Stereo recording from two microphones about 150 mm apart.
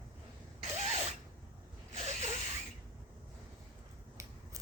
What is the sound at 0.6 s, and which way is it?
Zipper, 50° right (ahead or behind).